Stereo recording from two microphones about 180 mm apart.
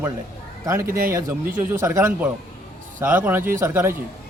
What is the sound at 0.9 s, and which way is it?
Speech, 50° right (ahead or behind).